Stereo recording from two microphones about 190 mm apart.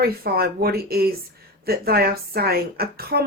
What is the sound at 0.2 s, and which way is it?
Speech, 55° right (ahead or behind).